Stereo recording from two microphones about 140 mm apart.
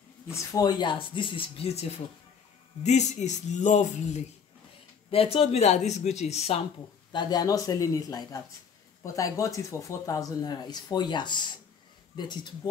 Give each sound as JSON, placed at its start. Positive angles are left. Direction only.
{"t": 0.3, "sound": "speech", "side_deg": 25}
{"t": 5.1, "sound": "speech", "side_deg": 45}
{"t": 7.1, "sound": "speech", "side_deg": 30}